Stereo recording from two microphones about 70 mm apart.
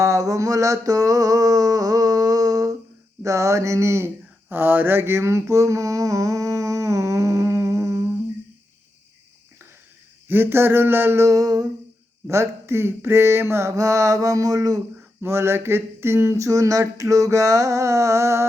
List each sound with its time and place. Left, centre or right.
0.0 s mantra: right
3.2 s speech: right
4.4 s mantra: right
10.2 s a sound: right
12.3 s speech: right
15.2 s speech: right